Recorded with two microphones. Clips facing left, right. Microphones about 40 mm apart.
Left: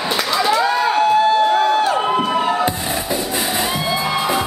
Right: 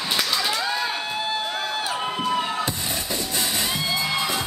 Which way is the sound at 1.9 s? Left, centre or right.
Left.